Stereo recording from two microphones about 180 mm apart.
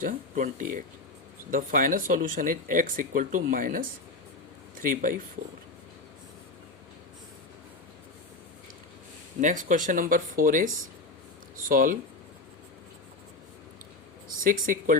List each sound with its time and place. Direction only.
0.0 s speech: 45° right (ahead or behind)
4.9 s speech: 50° right (ahead or behind)
9.4 s speech: 45° right (ahead or behind)
14.4 s speech: 50° right (ahead or behind)